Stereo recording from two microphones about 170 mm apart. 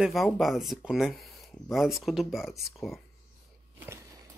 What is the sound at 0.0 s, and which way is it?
Speech, centre (ahead or behind).